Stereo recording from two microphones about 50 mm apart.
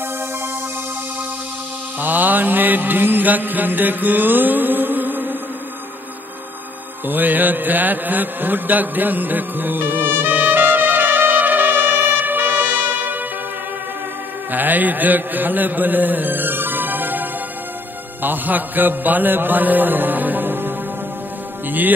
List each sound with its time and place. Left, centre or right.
2.0 s mantra: right
7.1 s a sound: right
14.5 s mantra: right